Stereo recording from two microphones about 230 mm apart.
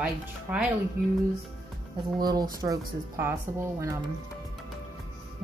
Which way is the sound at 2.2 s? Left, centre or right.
Centre.